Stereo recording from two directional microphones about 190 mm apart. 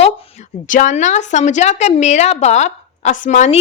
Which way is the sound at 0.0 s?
40° left (ahead or behind).